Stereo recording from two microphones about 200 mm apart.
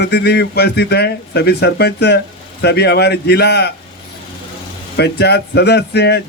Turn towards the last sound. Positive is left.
turn(degrees=55)  # may be behind; listen again after turning